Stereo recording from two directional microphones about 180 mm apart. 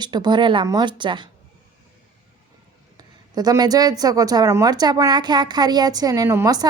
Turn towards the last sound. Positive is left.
turn(degrees=-20)  # may be behind; listen again after turning